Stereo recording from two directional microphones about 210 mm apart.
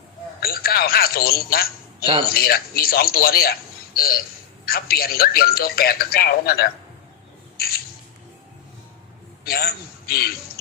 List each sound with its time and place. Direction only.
0.3 s a man's voice: 45° left (ahead or behind)
7.5 s squawk: 45° left (ahead or behind)
9.4 s a man's voice: 45° left (ahead or behind)